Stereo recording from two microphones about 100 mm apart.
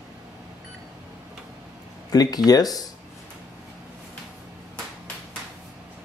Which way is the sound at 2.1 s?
40° left (ahead or behind).